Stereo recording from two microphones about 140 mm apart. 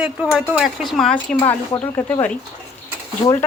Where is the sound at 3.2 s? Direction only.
25° left (ahead or behind).